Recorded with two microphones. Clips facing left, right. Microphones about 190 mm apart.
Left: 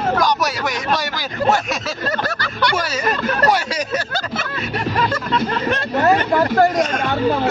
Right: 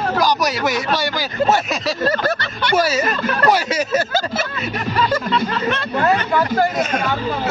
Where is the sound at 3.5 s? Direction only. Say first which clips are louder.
Right 2 dB; 5° right (ahead or behind).